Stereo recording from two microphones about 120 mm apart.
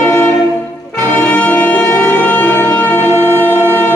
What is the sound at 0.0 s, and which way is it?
Music, 15° left (ahead or behind).